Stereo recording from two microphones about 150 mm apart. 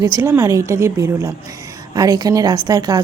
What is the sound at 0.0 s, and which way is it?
Speech, 20° right (ahead or behind).